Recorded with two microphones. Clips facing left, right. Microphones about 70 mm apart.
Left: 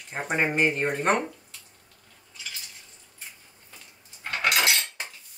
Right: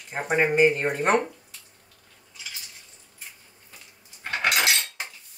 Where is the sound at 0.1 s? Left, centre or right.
Centre.